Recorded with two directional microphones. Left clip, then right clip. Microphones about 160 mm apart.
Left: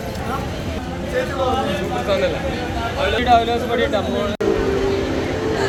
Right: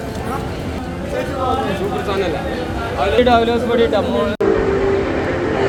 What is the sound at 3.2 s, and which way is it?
Speech, 65° right (ahead or behind).